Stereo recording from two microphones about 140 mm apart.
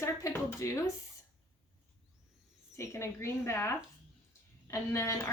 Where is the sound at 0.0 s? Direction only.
20° left (ahead or behind).